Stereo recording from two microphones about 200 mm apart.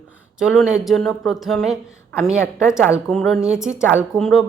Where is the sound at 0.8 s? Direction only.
Centre (ahead or behind).